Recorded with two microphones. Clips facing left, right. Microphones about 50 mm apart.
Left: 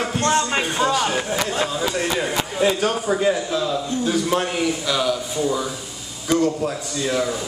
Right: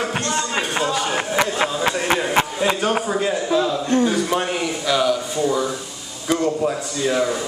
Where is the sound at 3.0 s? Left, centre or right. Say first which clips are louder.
Left 1 dB; centre.